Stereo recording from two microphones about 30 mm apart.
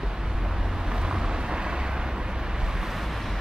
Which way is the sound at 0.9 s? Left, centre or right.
Right.